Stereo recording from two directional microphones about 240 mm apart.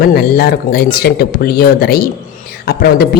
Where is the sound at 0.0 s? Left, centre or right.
Left.